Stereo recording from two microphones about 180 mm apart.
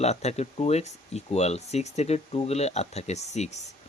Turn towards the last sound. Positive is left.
turn(degrees=40)  # may be behind; listen again after turning